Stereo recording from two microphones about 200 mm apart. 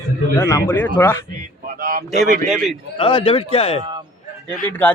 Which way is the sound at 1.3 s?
45° right (ahead or behind).